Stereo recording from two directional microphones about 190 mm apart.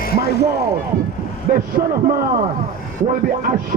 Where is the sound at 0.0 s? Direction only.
55° left (ahead or behind).